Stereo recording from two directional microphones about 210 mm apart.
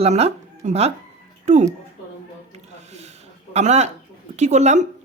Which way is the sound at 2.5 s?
30° right (ahead or behind).